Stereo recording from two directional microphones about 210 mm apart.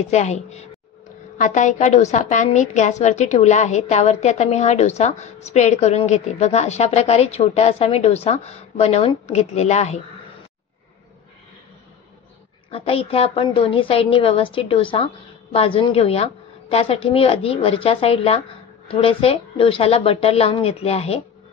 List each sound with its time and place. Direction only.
0.1 s a woman's voice: 30° left (ahead or behind)
12.7 s a woman's voice: 25° left (ahead or behind)